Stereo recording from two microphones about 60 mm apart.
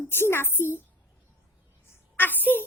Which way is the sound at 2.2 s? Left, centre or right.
Left.